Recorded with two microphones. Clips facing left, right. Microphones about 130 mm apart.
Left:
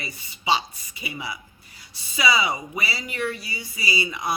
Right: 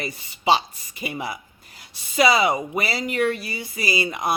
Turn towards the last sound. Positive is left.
turn(degrees=-50)  # may be behind; listen again after turning